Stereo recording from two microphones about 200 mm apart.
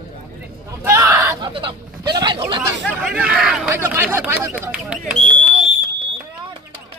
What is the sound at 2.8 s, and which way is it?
Speech, 5° right (ahead or behind).